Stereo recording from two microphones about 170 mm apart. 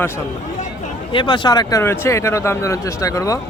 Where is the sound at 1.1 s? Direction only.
30° left (ahead or behind).